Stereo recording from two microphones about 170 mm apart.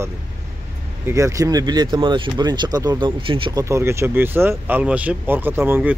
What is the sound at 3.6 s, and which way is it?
Speech, 15° right (ahead or behind).